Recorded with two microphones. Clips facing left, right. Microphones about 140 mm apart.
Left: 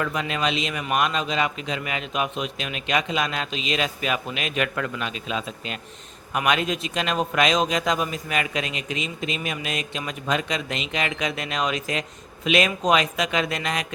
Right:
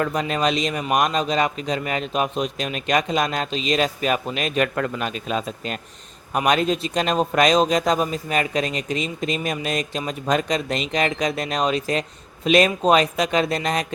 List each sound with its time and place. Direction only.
0.0 s speech: 40° right (ahead or behind)